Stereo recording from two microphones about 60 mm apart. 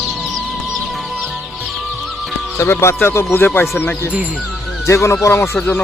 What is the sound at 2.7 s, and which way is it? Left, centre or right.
Speech, left.